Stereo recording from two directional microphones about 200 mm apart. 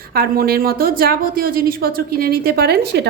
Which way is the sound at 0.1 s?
50° right (ahead or behind).